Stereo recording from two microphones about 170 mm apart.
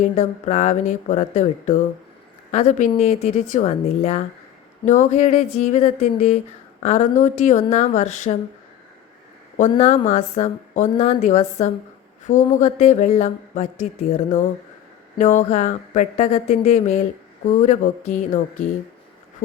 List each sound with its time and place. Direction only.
0.0 s a woman's voice: 45° left (ahead or behind)
9.6 s a woman's voice: 45° left (ahead or behind)